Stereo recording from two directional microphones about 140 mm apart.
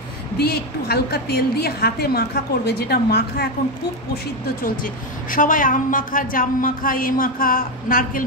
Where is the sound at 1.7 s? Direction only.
90° left.